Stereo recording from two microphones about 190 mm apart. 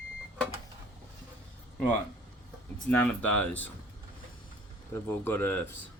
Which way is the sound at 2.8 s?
10° left (ahead or behind).